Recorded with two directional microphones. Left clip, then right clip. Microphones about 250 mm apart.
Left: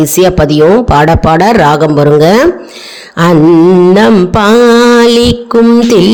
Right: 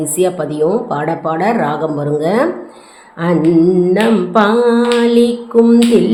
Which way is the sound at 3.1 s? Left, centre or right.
Left.